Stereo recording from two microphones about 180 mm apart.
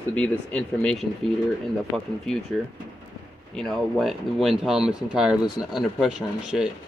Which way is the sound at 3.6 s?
Centre (ahead or behind).